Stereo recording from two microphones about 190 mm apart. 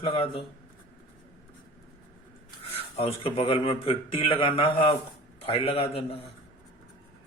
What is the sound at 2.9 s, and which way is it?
A man's voice, 30° left (ahead or behind).